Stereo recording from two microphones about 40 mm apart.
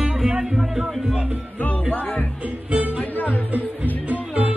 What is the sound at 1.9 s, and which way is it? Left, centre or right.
Speech, left.